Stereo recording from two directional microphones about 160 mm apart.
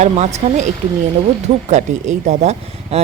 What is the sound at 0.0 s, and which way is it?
Speech, 45° right (ahead or behind).